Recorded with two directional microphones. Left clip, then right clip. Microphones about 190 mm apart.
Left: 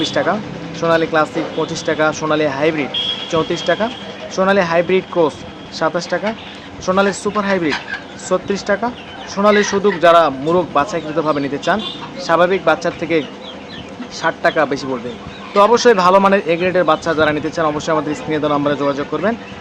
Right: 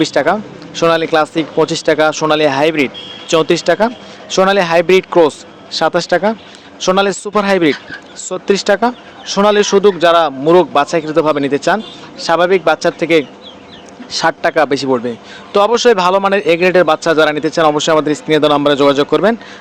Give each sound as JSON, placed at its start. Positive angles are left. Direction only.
{"t": 0.0, "sound": "speech", "side_deg": -50}